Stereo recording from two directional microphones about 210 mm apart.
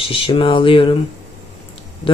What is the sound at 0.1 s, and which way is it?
Speech, 25° left (ahead or behind).